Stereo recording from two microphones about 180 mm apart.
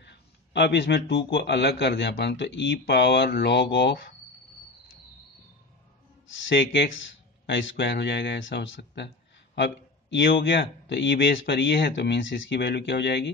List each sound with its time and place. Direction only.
0.0 s a man's voice: 75° left (ahead or behind)
6.5 s a man's voice: 80° left